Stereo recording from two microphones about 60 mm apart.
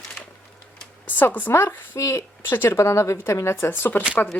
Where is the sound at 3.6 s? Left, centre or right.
Left.